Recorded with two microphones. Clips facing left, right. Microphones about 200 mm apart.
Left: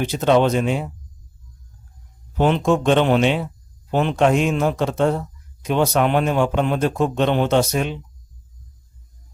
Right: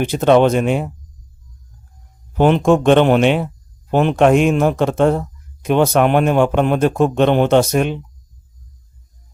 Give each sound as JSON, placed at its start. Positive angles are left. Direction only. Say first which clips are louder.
{"t": 0.0, "sound": "speech", "louder": "right 4 dB", "side_deg": -55}
{"t": 2.4, "sound": "speech", "louder": "right 5 dB", "side_deg": -55}